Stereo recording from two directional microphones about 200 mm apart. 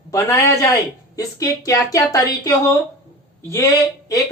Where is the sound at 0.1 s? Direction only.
15° left (ahead or behind).